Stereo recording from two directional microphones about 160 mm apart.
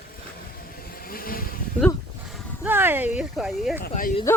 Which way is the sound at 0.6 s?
65° left (ahead or behind).